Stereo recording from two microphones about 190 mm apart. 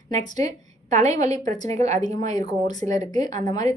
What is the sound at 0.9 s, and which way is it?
A woman's voice, 35° right (ahead or behind).